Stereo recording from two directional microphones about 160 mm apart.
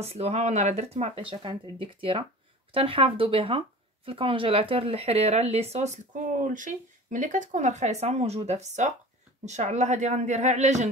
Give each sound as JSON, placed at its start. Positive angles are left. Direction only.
{"t": 0.0, "sound": "speech", "side_deg": -40}